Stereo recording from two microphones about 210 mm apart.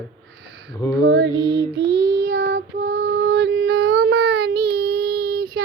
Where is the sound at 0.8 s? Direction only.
15° left (ahead or behind).